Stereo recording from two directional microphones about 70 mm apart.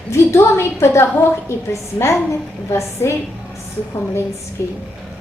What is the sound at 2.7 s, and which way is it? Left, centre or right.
Speech, left.